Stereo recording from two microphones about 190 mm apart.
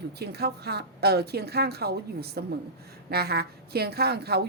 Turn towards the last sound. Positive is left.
turn(degrees=-55)  # may be behind; listen again after turning